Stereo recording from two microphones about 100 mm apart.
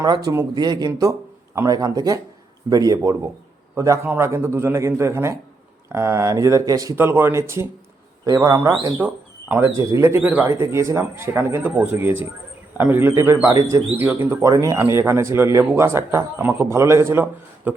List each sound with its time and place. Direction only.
0.0 s a man's voice: 40° right (ahead or behind)
7.0 s a man's voice: 25° right (ahead or behind)
9.0 s a man's voice: 15° right (ahead or behind)
14.4 s a man's voice: 35° right (ahead or behind)